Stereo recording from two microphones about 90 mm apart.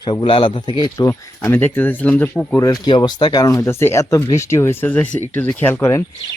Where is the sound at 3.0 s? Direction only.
55° left (ahead or behind).